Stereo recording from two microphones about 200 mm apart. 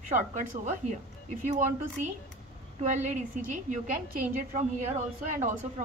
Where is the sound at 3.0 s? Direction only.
40° right (ahead or behind).